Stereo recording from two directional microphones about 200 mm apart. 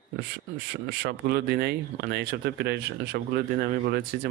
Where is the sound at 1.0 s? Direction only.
55° right (ahead or behind).